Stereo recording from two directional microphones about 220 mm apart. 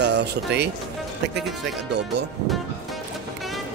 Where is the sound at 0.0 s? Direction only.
50° right (ahead or behind).